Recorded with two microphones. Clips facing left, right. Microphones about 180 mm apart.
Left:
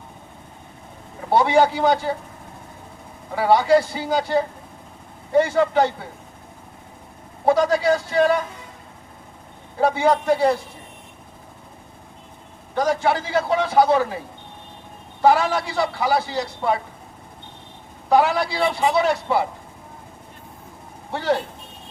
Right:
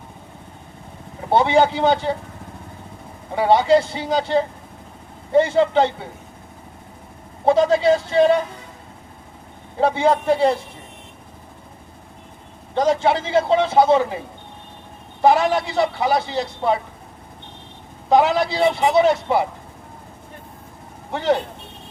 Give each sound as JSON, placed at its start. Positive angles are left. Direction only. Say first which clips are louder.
{"t": 1.3, "sound": "a man's voice", "louder": "right 1 dB", "side_deg": -25}
{"t": 3.3, "sound": "a man's voice", "louder": "right 1 dB", "side_deg": -25}
{"t": 7.4, "sound": "a man's voice", "louder": "right 2 dB", "side_deg": -25}
{"t": 9.8, "sound": "a man's voice", "louder": "right 1 dB", "side_deg": -25}
{"t": 12.7, "sound": "a man's voice", "louder": "right 2 dB", "side_deg": -25}
{"t": 15.2, "sound": "a man's voice", "louder": "right 1 dB", "side_deg": -20}
{"t": 18.1, "sound": "a man's voice", "louder": "right 2 dB", "side_deg": -20}
{"t": 21.1, "sound": "speech", "louder": "right 2 dB", "side_deg": -20}